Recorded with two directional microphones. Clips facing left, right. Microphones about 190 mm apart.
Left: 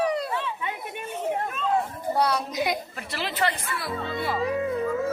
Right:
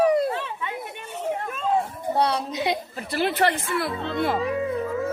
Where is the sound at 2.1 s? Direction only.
30° right (ahead or behind).